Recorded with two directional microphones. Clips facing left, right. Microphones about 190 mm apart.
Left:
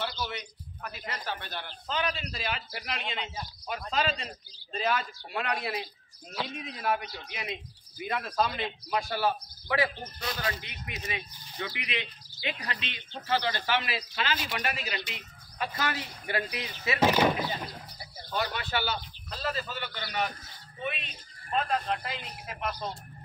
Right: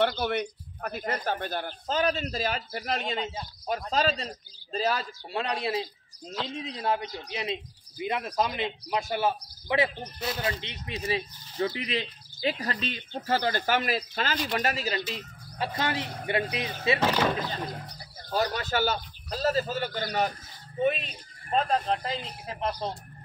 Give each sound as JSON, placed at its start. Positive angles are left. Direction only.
{"t": 0.0, "sound": "speech", "side_deg": -60}
{"t": 15.1, "sound": "speech", "side_deg": -30}
{"t": 17.0, "sound": "speech", "side_deg": 10}
{"t": 18.3, "sound": "speech", "side_deg": -40}